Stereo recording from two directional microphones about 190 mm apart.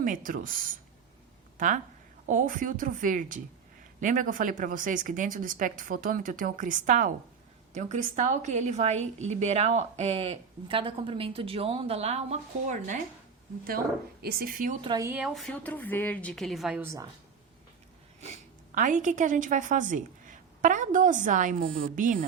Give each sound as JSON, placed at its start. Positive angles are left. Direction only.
{"t": 0.0, "sound": "speech", "side_deg": -45}
{"t": 1.5, "sound": "a woman's voice", "side_deg": -45}
{"t": 14.2, "sound": "speech", "side_deg": -55}
{"t": 14.8, "sound": "a woman's voice", "side_deg": -20}
{"t": 18.2, "sound": "a woman's voice", "side_deg": -40}